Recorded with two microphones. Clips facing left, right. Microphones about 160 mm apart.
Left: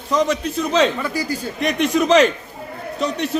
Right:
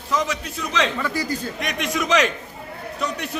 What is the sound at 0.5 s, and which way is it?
A man's voice, 40° left (ahead or behind).